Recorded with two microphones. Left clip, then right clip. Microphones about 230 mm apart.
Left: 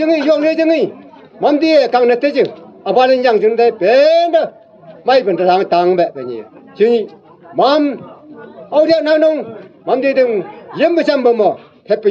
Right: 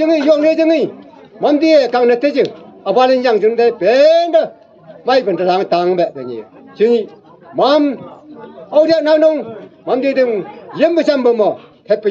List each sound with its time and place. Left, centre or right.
0.0 s a man's voice: left